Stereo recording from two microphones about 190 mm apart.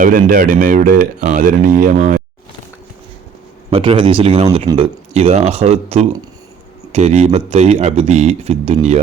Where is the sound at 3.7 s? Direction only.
30° right (ahead or behind).